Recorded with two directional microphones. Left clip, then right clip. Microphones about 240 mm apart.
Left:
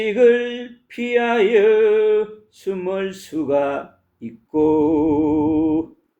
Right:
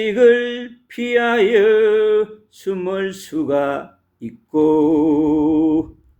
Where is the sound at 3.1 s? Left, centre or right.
Right.